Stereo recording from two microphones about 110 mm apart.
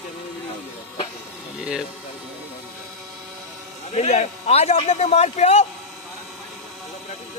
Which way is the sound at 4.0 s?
90° left.